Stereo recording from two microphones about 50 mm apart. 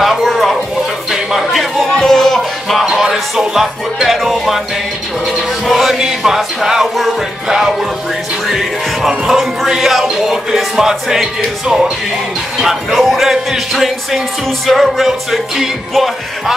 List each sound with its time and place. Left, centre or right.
0.0 s a sound: centre
1.1 s music: centre
2.0 s music: centre
2.8 s music: centre
5.7 s music: centre
10.1 s speech: centre
12.9 s music: centre